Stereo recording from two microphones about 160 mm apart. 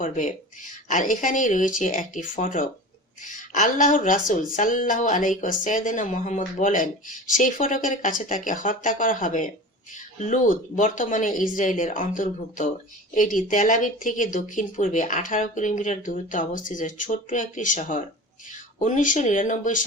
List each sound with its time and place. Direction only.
0.0 s speech: 50° left (ahead or behind)